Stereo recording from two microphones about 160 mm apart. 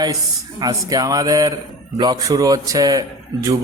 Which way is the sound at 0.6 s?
25° right (ahead or behind).